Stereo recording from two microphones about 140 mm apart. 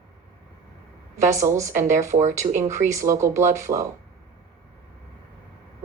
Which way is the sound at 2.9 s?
20° right (ahead or behind).